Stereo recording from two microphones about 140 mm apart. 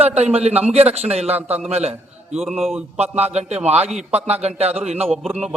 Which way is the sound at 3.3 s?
50° right (ahead or behind).